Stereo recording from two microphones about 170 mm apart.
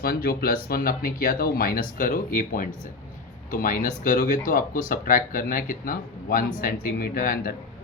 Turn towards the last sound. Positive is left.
turn(degrees=55)  # may be behind; listen again after turning